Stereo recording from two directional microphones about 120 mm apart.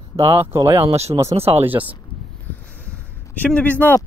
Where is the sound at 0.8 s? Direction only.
60° right (ahead or behind).